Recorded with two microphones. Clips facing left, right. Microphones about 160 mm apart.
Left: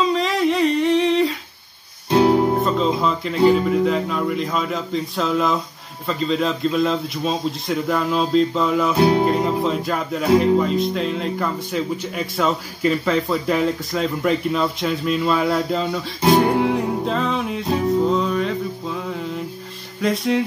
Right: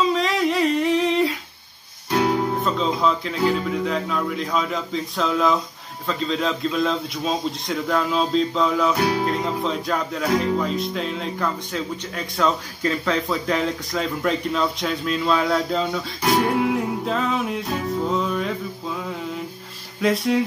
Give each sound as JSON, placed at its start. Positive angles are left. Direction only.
{"t": 0.0, "sound": "a sound", "side_deg": 0}
{"t": 2.0, "sound": "music", "side_deg": 30}
{"t": 2.6, "sound": "music", "side_deg": 0}
{"t": 3.4, "sound": "speech", "side_deg": 0}
{"t": 8.9, "sound": "music", "side_deg": 25}
{"t": 9.2, "sound": "speech", "side_deg": 5}
{"t": 16.2, "sound": "music", "side_deg": 25}
{"t": 16.4, "sound": "music", "side_deg": 0}
{"t": 20.0, "sound": "speech", "side_deg": 0}